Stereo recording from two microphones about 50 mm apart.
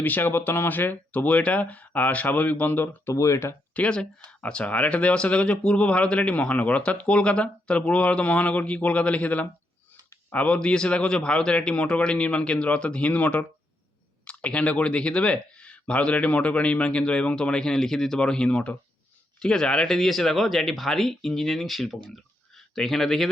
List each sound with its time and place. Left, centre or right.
0.0 s speech: left
3.1 s speech: left
3.8 s speech: centre